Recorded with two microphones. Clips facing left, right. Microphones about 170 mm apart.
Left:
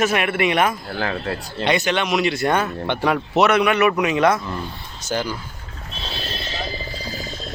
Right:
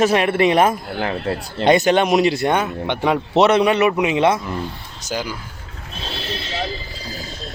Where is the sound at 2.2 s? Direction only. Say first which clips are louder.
Right 2 dB; 20° right (ahead or behind).